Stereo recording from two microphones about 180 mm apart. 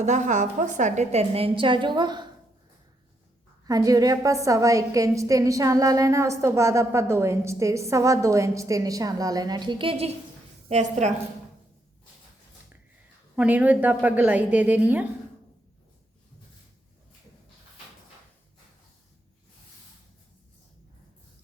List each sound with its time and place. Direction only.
0.0 s a woman's voice: 40° right (ahead or behind); by 2.2 s 25° right (ahead or behind)
3.7 s a woman's voice: 20° right (ahead or behind)
10.7 s a woman's voice: 40° right (ahead or behind)
13.3 s a woman's voice: 10° right (ahead or behind)